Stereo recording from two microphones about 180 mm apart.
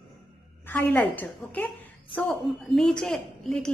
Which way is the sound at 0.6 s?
10° left (ahead or behind).